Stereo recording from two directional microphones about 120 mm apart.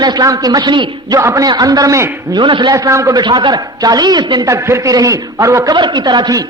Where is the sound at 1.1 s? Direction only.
30° right (ahead or behind).